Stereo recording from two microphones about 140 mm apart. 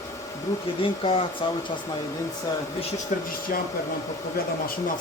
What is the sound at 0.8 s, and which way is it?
Speech, 40° left (ahead or behind).